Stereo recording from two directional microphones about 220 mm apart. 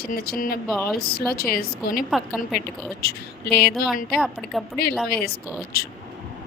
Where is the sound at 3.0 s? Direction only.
45° left (ahead or behind).